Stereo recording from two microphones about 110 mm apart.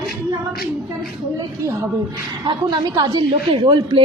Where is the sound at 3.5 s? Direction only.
50° right (ahead or behind).